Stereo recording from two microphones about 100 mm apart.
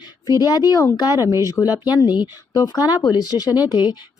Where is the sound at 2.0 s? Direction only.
45° left (ahead or behind).